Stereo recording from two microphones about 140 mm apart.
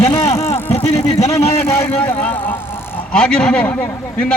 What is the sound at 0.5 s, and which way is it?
Speech, 50° left (ahead or behind).